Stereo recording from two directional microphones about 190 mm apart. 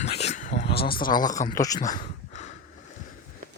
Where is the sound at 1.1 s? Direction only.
20° left (ahead or behind).